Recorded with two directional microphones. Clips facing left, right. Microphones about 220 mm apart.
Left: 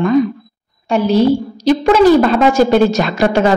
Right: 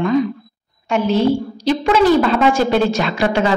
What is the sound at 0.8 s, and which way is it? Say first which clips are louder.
A woman's voice: left 4 dB; 35° left (ahead or behind).